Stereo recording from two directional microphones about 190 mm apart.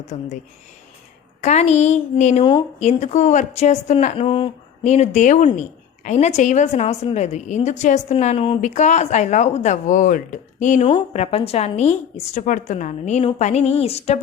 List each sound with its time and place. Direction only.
0.1 s a woman's voice: 35° left (ahead or behind)
1.4 s a woman's voice: 35° left (ahead or behind)
2.4 s speech: 25° left (ahead or behind)
2.7 s a woman's voice: 35° left (ahead or behind)